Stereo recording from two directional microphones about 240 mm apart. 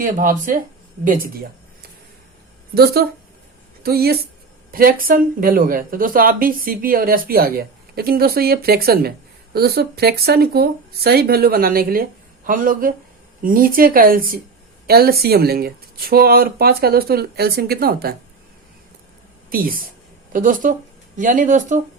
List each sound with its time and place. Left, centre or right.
0.0 s speech: right
2.7 s speech: right
19.5 s speech: right